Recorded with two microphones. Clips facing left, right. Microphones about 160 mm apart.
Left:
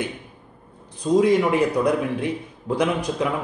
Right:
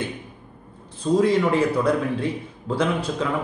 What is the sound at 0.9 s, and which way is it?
A man's voice, 15° left (ahead or behind).